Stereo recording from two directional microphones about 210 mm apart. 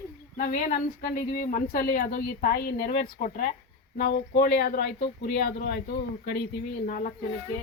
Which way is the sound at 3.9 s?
50° left (ahead or behind).